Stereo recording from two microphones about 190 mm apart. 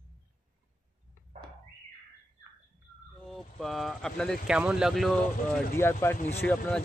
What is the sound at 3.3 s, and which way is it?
Speech, centre (ahead or behind).